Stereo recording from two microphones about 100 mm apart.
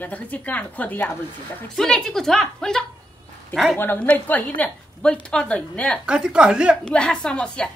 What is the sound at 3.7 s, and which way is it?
A woman's voice, 20° left (ahead or behind).